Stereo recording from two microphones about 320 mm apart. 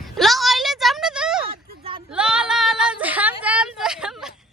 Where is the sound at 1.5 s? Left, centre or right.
Centre.